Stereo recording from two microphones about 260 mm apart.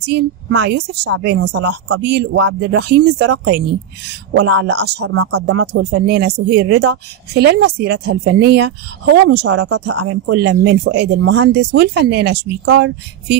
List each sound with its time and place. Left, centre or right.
0.0 s speech: right
4.3 s speech: right
5.0 s speech: right
5.9 s speech: right